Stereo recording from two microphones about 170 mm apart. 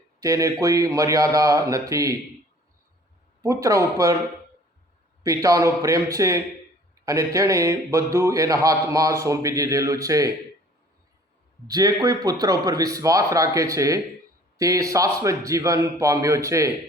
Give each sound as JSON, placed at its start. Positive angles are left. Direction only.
{"t": 0.2, "sound": "a man's voice", "side_deg": -20}
{"t": 3.4, "sound": "a man's voice", "side_deg": -20}
{"t": 5.2, "sound": "a man's voice", "side_deg": -20}
{"t": 11.7, "sound": "a man's voice", "side_deg": -20}